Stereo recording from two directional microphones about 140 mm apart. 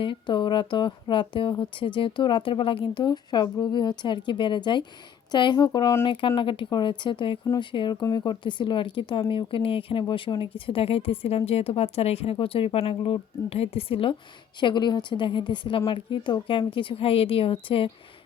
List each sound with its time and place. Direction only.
0.0 s speech: 35° left (ahead or behind)
6.1 s speech: 35° left (ahead or behind)